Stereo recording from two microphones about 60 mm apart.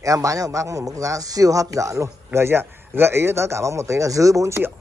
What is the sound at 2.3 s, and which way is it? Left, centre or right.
A man's voice, right.